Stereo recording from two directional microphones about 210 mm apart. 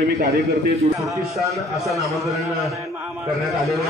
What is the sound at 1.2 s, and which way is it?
A man's voice, centre (ahead or behind).